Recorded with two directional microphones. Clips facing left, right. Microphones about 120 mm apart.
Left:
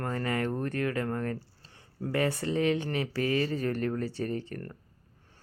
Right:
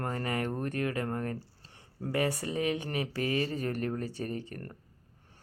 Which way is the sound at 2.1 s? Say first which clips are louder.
Left 2 dB; 15° right (ahead or behind).